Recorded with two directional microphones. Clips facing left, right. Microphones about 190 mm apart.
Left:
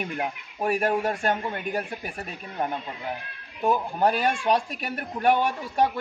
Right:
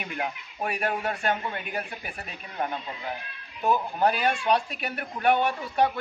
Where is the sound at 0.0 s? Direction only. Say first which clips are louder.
Left 3 dB; 40° left (ahead or behind).